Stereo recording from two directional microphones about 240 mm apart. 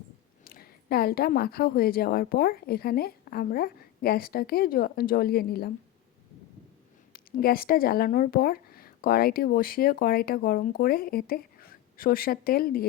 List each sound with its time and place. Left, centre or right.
0.4 s speech: left
7.1 s speech: left